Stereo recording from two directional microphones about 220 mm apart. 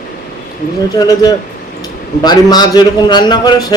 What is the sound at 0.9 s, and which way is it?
Speech, 15° left (ahead or behind).